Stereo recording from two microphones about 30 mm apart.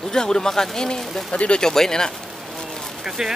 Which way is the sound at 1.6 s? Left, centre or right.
Centre.